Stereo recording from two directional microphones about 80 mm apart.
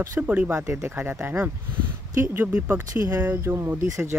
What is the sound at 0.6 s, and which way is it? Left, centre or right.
Speech, right.